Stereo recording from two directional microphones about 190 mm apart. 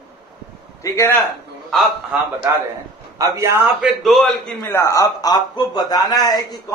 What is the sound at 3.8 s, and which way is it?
Speech, centre (ahead or behind).